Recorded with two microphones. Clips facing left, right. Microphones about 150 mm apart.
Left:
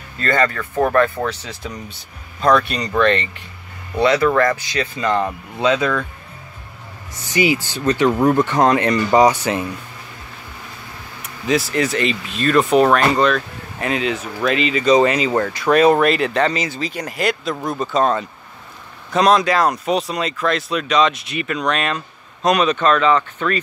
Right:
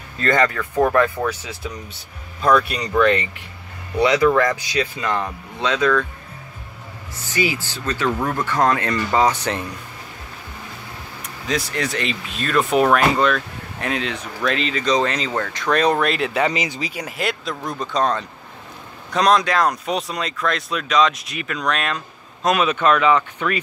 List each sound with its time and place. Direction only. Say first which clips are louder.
0.2 s speech: even; 15° right (ahead or behind)
5.0 s speech: left 4 dB; 5° left (ahead or behind)
7.3 s speech: left 5 dB; 15° left (ahead or behind)
11.4 s speech: left 6 dB; 5° left (ahead or behind); by 23.6 s 10° right (ahead or behind)